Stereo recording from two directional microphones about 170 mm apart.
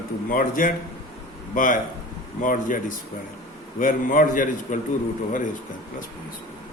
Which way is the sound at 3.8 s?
55° left (ahead or behind).